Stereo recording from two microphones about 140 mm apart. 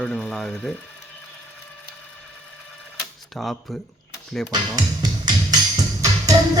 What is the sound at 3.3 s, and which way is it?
Speech, centre (ahead or behind).